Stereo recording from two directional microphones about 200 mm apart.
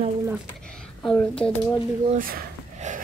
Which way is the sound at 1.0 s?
5° left (ahead or behind).